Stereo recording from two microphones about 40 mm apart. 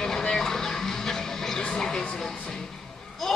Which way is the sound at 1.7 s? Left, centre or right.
Centre.